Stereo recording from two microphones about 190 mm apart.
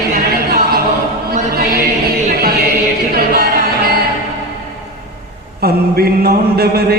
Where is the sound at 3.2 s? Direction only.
50° right (ahead or behind).